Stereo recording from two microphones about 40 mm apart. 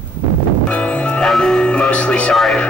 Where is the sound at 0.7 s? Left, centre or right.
Left.